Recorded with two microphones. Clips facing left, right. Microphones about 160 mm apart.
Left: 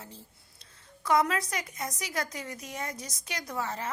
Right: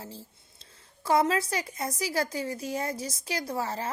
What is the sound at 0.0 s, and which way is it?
A woman's voice, 30° right (ahead or behind).